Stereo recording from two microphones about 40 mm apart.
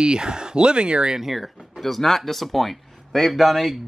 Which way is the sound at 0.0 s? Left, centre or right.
Right.